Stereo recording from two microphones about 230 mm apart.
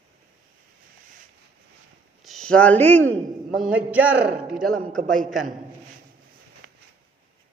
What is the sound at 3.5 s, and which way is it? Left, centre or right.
A man's voice, centre.